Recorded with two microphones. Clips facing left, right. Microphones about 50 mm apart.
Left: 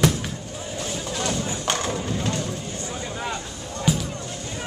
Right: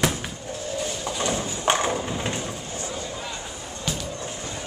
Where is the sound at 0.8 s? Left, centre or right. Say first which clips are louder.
Left 1 dB; centre.